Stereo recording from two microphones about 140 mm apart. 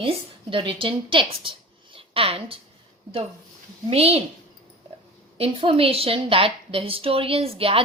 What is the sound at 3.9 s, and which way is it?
Speech, 45° right (ahead or behind).